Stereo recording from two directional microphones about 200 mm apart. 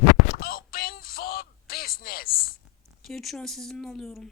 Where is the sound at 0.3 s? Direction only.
45° left (ahead or behind).